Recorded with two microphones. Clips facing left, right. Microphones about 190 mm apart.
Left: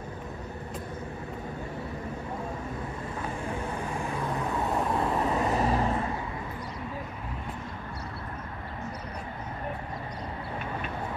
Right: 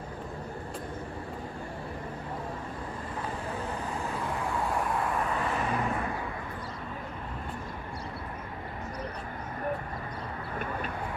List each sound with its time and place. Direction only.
4.0 s vehicle: 20° left (ahead or behind)